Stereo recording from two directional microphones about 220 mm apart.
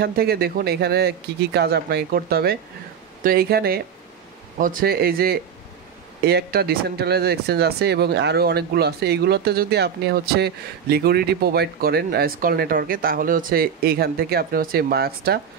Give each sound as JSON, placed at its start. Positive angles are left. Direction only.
{"t": 0.0, "sound": "speech", "side_deg": -45}